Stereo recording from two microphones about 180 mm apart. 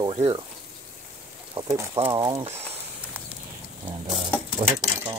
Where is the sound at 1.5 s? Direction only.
15° right (ahead or behind).